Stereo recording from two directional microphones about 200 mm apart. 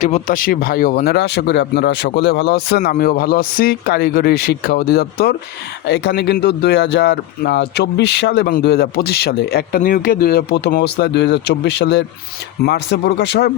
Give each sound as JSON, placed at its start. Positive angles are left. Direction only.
{"t": 0.0, "sound": "speech", "side_deg": 40}